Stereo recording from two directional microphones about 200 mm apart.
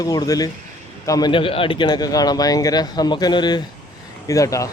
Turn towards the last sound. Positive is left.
turn(degrees=15)  # may be behind; listen again after turning